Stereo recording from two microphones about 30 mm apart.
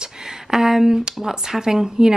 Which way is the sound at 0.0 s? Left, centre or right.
Centre.